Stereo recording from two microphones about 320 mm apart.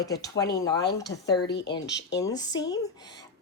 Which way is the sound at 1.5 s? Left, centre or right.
Left.